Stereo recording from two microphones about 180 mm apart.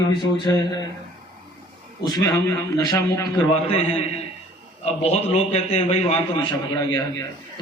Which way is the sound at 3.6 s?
35° left (ahead or behind).